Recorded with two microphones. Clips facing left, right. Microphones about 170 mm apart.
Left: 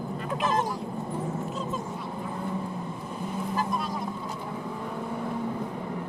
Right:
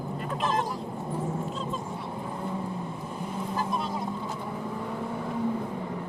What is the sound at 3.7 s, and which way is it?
Boat, 25° right (ahead or behind).